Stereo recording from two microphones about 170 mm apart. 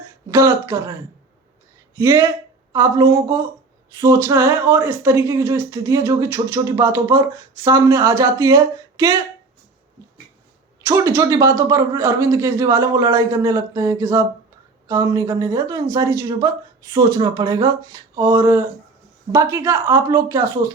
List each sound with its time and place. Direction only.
0.3 s speech: 15° right (ahead or behind)
2.0 s speech: 15° right (ahead or behind)
10.8 s speech: 15° right (ahead or behind)